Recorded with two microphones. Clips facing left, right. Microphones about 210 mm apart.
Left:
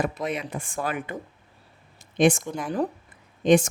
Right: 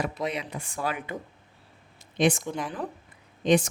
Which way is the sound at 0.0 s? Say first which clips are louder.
Left 3 dB; 50° left (ahead or behind).